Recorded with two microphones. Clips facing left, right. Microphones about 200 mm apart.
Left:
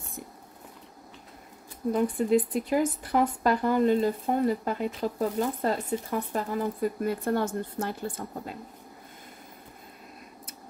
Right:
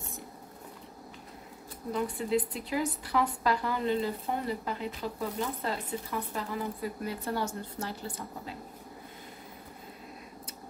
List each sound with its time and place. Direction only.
1.9 s speech: 50° left (ahead or behind)